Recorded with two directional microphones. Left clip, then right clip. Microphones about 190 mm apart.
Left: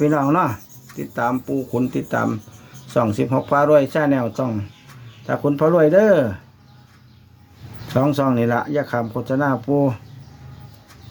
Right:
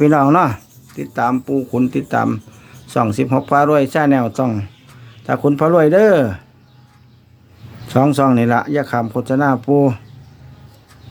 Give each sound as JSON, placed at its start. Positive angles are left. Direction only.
{"t": 0.0, "sound": "speech", "side_deg": -40}
{"t": 1.1, "sound": "speech", "side_deg": -20}
{"t": 7.9, "sound": "speech", "side_deg": -30}